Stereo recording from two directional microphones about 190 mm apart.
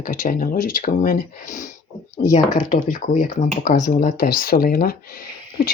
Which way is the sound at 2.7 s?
45° left (ahead or behind).